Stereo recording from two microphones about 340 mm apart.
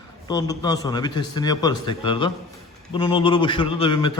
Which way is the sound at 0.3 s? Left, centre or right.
Centre.